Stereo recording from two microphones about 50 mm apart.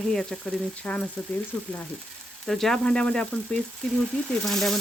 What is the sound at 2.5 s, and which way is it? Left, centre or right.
Speech, centre.